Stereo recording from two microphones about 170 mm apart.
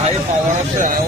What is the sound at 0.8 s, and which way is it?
Speech, 50° right (ahead or behind).